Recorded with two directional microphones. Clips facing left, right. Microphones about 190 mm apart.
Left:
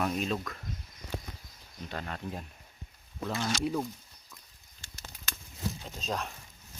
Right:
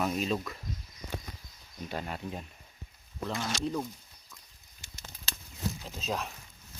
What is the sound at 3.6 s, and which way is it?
Speech, 10° left (ahead or behind).